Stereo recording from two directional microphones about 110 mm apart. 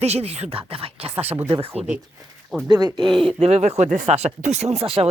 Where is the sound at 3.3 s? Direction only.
80° right; by 5.1 s 65° right (ahead or behind).